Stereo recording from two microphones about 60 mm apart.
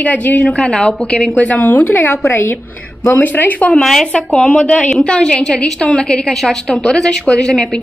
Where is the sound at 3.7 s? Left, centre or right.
Centre.